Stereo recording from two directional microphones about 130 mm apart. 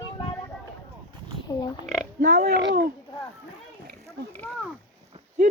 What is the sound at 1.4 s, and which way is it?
Pig, 30° left (ahead or behind).